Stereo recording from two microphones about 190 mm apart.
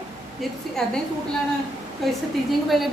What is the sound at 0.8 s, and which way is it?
Speech, 5° left (ahead or behind).